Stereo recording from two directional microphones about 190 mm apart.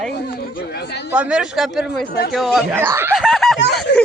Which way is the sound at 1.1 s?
5° right (ahead or behind).